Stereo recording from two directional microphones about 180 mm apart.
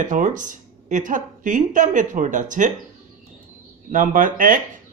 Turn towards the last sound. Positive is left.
turn(degrees=-50)  # may be behind; listen again after turning